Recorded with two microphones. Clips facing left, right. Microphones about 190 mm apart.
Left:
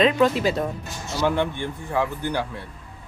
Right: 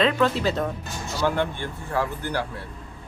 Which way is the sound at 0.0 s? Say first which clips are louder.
Left 3 dB; 15° left (ahead or behind).